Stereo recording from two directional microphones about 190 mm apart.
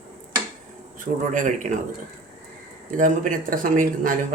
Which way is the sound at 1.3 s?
40° right (ahead or behind).